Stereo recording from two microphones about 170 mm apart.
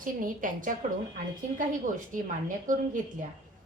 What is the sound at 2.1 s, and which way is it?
Speech, 50° right (ahead or behind).